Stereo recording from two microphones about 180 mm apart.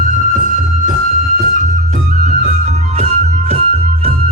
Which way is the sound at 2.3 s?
40° right (ahead or behind).